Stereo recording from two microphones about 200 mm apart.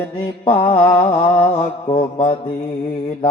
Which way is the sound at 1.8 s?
45° left (ahead or behind).